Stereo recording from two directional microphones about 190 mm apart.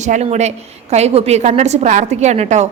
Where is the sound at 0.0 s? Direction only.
35° right (ahead or behind).